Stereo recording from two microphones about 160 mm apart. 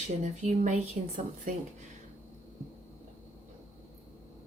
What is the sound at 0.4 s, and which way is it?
A woman's voice, 50° right (ahead or behind).